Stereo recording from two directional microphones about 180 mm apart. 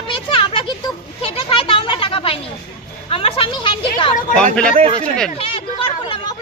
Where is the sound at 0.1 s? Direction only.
30° left (ahead or behind).